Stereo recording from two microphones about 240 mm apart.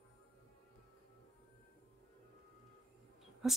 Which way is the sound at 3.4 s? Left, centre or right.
Centre.